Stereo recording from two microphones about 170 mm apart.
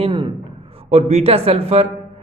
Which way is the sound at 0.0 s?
30° right (ahead or behind).